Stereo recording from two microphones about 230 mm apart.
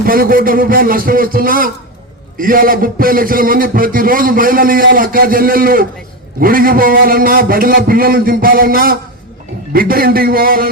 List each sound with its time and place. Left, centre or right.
0.0 s a man's voice: right